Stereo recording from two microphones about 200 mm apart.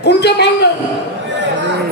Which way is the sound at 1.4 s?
60° right (ahead or behind).